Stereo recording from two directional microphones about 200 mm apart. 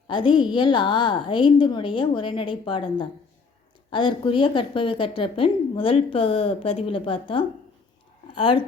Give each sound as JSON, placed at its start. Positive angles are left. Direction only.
{"t": 0.1, "sound": "a woman's voice", "side_deg": 25}